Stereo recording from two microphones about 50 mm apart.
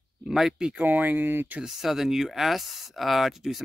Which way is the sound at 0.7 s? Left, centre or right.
Right.